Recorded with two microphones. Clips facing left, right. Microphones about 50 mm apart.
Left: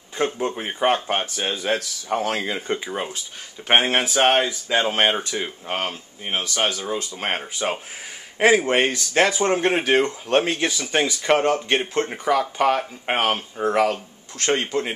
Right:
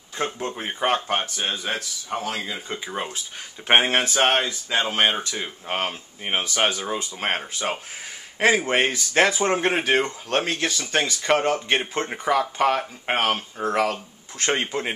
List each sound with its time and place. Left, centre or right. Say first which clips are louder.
0.4 s speech: left 3 dB; centre
2.2 s speech: left 4 dB; left
2.8 s speech: left 2 dB; centre
5.7 s speech: right 1 dB; centre
6.2 s speech: right 1 dB; right; by 14.0 s centre
14.4 s speech: left 2 dB; centre